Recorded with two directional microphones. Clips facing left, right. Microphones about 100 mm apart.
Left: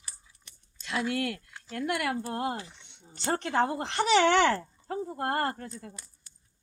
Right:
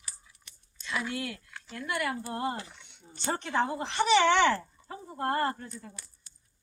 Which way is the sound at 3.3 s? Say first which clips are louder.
Left 2 dB; 65° left (ahead or behind).